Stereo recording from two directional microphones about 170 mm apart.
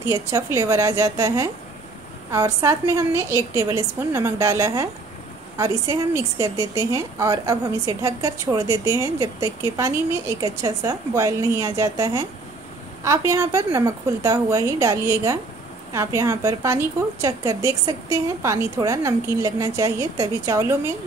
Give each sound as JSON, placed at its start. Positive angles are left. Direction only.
{"t": 0.0, "sound": "a woman's voice", "side_deg": -20}